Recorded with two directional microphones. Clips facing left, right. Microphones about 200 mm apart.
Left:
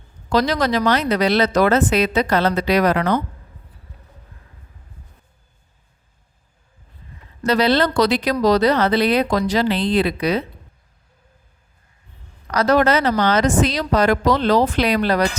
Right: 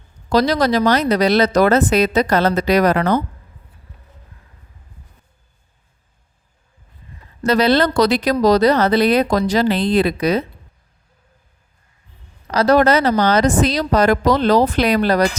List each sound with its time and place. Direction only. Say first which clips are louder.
0.3 s speech: right 3 dB; 35° right (ahead or behind)
7.4 s speech: right 2 dB; 45° right (ahead or behind)
12.5 s speech: right 3 dB; 35° right (ahead or behind)